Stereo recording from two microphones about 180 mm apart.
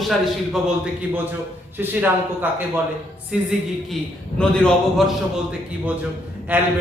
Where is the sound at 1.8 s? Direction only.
10° right (ahead or behind).